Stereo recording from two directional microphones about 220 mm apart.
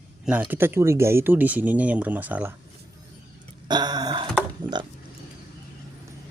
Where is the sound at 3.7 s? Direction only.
20° right (ahead or behind).